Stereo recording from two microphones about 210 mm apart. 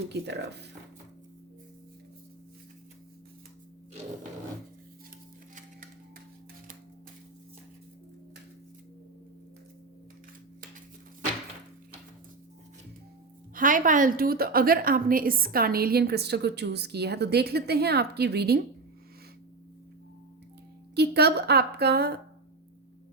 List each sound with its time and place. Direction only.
0.1 s a woman's voice: 55° right (ahead or behind)
13.5 s a woman's voice: 40° right (ahead or behind)
20.9 s a woman's voice: 50° right (ahead or behind)